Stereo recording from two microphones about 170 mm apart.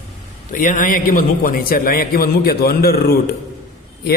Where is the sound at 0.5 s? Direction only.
50° left (ahead or behind).